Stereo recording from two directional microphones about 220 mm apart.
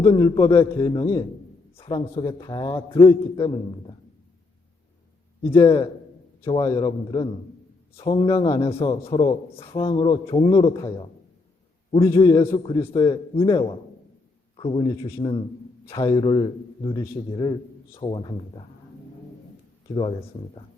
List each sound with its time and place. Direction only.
0.1 s a man's voice: 20° left (ahead or behind)
5.5 s a man's voice: 25° left (ahead or behind)
12.0 s a man's voice: 15° left (ahead or behind)